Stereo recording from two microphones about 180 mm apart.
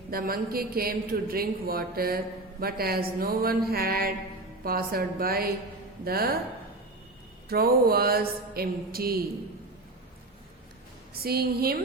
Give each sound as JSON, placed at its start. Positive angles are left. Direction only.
{"t": 0.1, "sound": "speech", "side_deg": -55}
{"t": 7.4, "sound": "speech", "side_deg": -60}
{"t": 11.1, "sound": "speech", "side_deg": -60}